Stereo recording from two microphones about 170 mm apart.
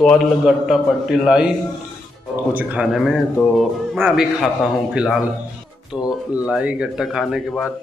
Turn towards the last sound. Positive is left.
turn(degrees=0)  # may be behind; listen again after turning